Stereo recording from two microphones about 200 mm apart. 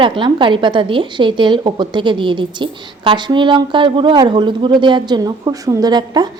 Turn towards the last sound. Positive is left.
turn(degrees=-20)  # may be behind; listen again after turning